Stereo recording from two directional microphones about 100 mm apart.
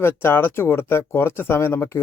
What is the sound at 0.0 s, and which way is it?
Speech, 25° left (ahead or behind).